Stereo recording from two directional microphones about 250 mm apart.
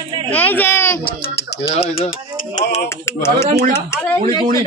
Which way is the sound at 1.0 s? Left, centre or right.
Left.